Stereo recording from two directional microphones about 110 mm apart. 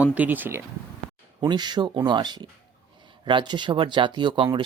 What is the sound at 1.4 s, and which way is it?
Speech, 40° right (ahead or behind).